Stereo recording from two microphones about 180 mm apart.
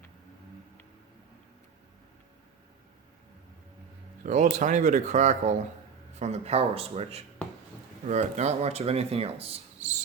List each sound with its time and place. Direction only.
4.2 s speech: 40° right (ahead or behind)